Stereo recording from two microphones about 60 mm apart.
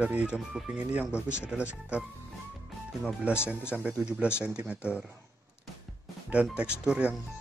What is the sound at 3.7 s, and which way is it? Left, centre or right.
Speech, centre.